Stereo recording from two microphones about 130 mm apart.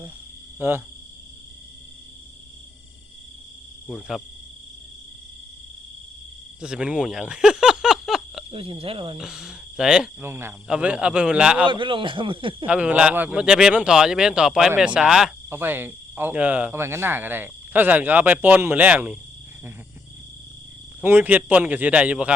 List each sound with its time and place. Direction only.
0.6 s a sound: 20° right (ahead or behind)
3.8 s speech: 5° right (ahead or behind)
6.6 s a sound: 5° right (ahead or behind)
8.4 s speech: 45° right (ahead or behind)
9.1 s speech: 5° right (ahead or behind)
10.2 s speech: 20° right (ahead or behind)
11.7 s a man's voice: 40° right (ahead or behind)
12.6 s speech: 10° right (ahead or behind)
15.4 s speech: 15° right (ahead or behind)
21.0 s speech: 15° right (ahead or behind)